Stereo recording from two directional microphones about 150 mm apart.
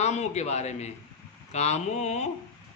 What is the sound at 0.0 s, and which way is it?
Speech, 50° left (ahead or behind).